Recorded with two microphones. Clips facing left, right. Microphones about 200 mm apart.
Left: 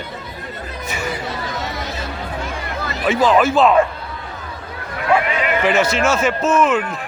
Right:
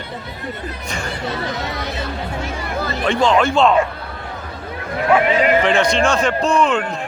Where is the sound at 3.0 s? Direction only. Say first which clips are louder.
Left 1 dB; 5° left (ahead or behind).